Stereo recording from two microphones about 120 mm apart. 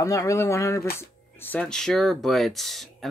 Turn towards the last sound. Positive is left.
turn(degrees=0)  # may be behind; listen again after turning